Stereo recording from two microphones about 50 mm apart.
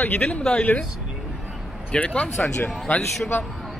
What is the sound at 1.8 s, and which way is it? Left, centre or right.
Speech, left.